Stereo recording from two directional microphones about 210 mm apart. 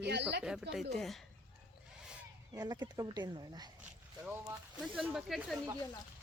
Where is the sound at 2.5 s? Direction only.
20° right (ahead or behind).